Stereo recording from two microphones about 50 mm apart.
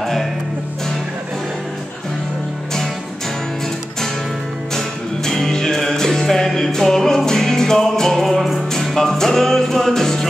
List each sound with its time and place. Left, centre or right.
0.0 s music: centre
4.7 s music: centre